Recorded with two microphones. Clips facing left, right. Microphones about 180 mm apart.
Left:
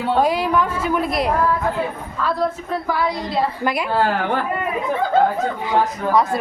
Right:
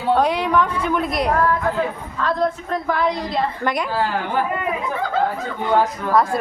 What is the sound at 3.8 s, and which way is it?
Speech, 65° left (ahead or behind).